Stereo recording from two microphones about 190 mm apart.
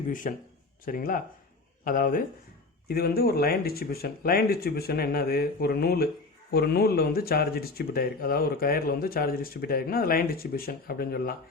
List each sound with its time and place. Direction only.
0.1 s speech: 45° left (ahead or behind)